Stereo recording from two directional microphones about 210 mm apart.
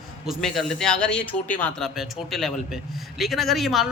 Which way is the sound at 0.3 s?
Centre (ahead or behind).